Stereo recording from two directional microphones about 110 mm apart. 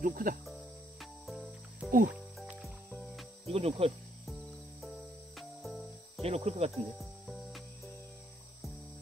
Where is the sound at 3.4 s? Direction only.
60° right (ahead or behind).